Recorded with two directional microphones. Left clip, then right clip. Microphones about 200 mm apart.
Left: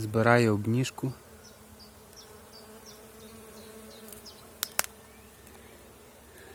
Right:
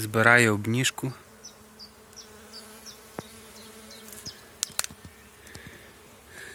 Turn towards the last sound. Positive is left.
turn(degrees=-5)  # may be behind; listen again after turning